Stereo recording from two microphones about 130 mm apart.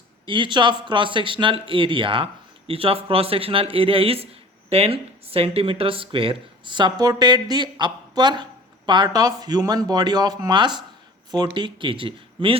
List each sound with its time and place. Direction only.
0.3 s speech: 35° right (ahead or behind)